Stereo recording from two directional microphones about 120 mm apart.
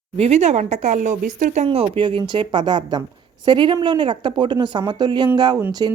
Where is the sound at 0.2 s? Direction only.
65° right (ahead or behind); by 1.6 s 90° right.